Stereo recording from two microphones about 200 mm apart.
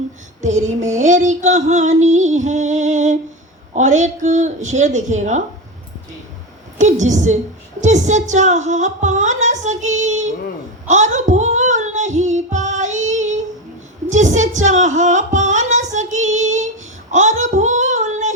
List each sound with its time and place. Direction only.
0.4 s female singing: 35° right (ahead or behind)
6.7 s female singing: 35° right (ahead or behind)
10.8 s child singing: 35° right (ahead or behind)
14.1 s speech: 35° right (ahead or behind)
17.1 s child singing: 35° right (ahead or behind)